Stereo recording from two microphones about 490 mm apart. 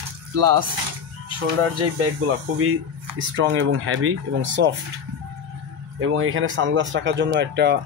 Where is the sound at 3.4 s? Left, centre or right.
Right.